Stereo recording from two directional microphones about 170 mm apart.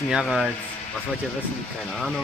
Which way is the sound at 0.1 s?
Centre (ahead or behind).